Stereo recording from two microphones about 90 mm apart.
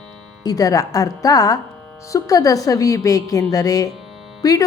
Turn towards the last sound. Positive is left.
turn(degrees=45)  # may be behind; listen again after turning